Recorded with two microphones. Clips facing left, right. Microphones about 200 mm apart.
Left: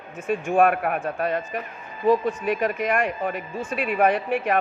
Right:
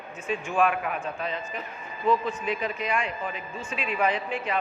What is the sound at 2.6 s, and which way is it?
A man's voice, 60° left (ahead or behind).